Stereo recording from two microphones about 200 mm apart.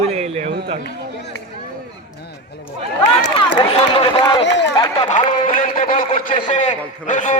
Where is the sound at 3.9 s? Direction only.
25° left (ahead or behind).